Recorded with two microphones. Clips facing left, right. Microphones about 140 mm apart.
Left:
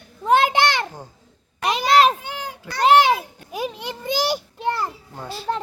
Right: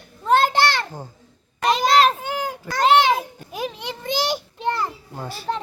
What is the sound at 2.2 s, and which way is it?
Children playing, 45° right (ahead or behind).